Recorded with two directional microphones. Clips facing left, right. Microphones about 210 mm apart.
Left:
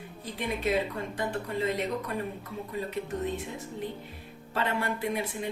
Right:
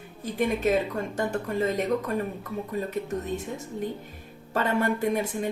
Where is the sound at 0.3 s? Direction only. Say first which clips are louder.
Right 5 dB; 45° right (ahead or behind).